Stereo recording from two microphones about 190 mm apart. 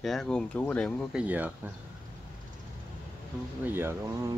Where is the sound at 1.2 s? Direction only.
10° right (ahead or behind).